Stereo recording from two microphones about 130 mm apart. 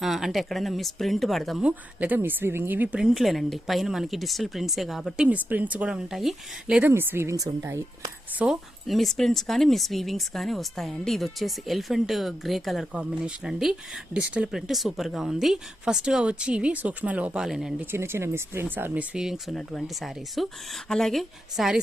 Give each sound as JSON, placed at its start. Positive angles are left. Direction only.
{"t": 0.0, "sound": "speech", "side_deg": 0}
{"t": 8.4, "sound": "speech", "side_deg": 0}
{"t": 17.9, "sound": "speech", "side_deg": -20}
{"t": 19.1, "sound": "speech", "side_deg": -5}